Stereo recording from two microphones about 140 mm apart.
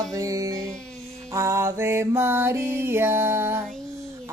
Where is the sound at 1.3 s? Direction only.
20° right (ahead or behind).